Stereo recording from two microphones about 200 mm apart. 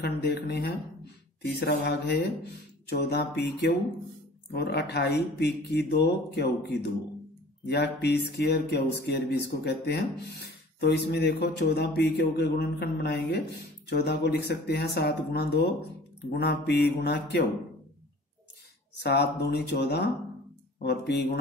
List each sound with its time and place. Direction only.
0.0 s speech: 55° left (ahead or behind)
4.5 s speech: 55° left (ahead or behind)
19.0 s speech: 55° left (ahead or behind)